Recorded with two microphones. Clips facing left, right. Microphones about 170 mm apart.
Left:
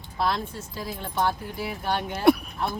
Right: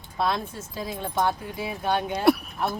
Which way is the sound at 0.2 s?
20° right (ahead or behind).